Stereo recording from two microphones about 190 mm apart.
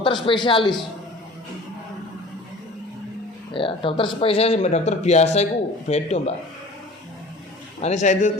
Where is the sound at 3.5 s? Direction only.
25° left (ahead or behind).